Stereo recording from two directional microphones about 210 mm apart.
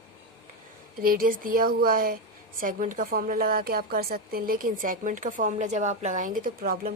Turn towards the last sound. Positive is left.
turn(degrees=-45)  # may be behind; listen again after turning